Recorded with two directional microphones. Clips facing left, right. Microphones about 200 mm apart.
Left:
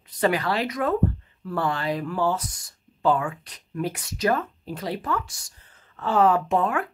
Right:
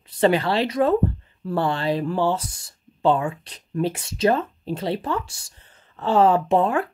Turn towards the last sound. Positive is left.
turn(degrees=-30)  # may be behind; listen again after turning